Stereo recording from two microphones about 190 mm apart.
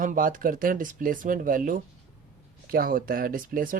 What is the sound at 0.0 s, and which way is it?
Speech, 45° right (ahead or behind).